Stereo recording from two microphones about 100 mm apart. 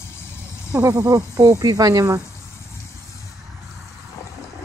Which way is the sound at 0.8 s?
40° right (ahead or behind).